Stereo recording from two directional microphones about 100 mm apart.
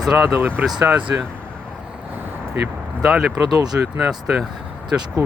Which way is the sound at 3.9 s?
10° right (ahead or behind).